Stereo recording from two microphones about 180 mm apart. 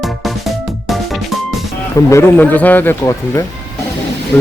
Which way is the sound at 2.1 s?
15° left (ahead or behind).